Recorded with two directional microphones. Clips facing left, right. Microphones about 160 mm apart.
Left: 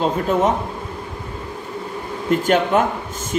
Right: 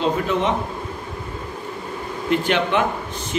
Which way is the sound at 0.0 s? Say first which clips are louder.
Left 2 dB; 45° left (ahead or behind).